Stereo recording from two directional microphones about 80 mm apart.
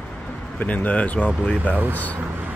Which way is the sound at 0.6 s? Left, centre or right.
Centre.